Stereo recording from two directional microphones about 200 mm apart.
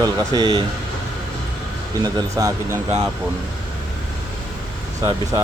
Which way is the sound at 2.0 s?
15° right (ahead or behind).